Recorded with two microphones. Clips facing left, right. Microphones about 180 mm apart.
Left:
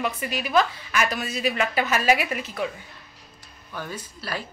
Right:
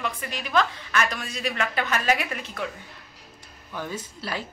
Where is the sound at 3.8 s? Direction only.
20° right (ahead or behind).